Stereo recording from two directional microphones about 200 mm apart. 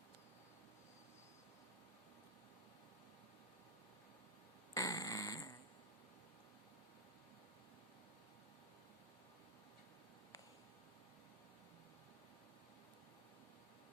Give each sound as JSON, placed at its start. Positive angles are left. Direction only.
{"t": 4.7, "sound": "fart", "side_deg": 15}